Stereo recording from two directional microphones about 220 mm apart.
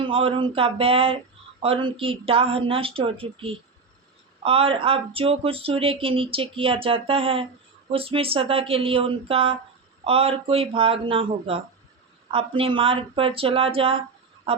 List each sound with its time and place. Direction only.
0.0 s speech: 25° right (ahead or behind)